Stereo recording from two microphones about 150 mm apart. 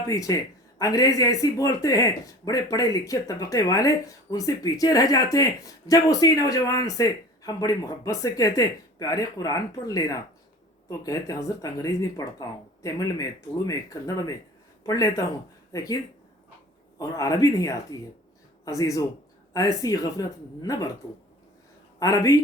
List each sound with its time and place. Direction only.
0.1 s speech: 25° left (ahead or behind)
17.0 s a man's voice: 20° left (ahead or behind)
21.9 s speech: 20° left (ahead or behind)